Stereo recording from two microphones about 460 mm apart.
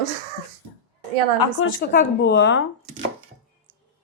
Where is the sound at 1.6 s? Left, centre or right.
Centre.